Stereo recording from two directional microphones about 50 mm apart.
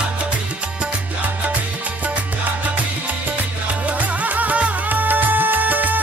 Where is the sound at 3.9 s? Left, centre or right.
Right.